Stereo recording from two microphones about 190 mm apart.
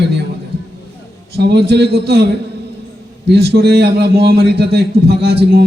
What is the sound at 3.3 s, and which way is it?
A man's voice, 60° right (ahead or behind).